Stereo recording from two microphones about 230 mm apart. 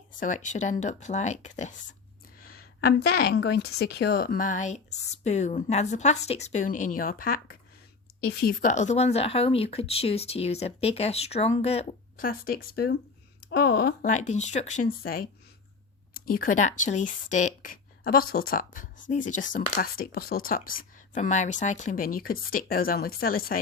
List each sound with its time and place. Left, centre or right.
0.1 s speech: left
2.4 s a sound: left
3.4 s speech: left
8.4 s speech: left
12.2 s speech: left
14.2 s speech: left